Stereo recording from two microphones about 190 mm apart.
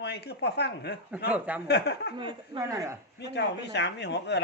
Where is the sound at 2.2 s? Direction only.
25° right (ahead or behind).